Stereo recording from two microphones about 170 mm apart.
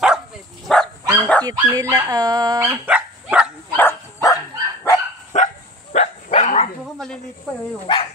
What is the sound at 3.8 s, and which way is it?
Dog, 10° left (ahead or behind).